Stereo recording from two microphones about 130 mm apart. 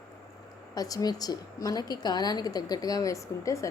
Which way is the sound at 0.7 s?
30° left (ahead or behind).